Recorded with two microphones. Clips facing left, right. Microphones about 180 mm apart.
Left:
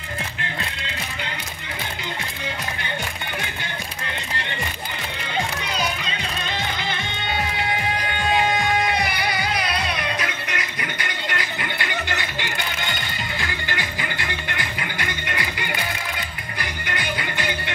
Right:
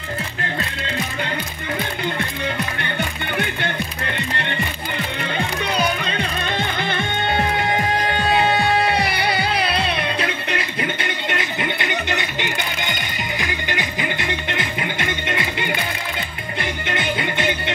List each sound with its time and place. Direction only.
3.3 s music: 60° right (ahead or behind)
5.8 s music: 55° right (ahead or behind); by 15.8 s 25° right (ahead or behind)
16.8 s music: 25° right (ahead or behind)